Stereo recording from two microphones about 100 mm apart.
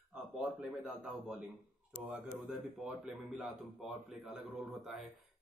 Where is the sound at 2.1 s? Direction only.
10° right (ahead or behind).